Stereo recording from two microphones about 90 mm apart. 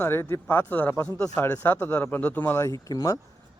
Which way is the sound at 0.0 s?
25° left (ahead or behind).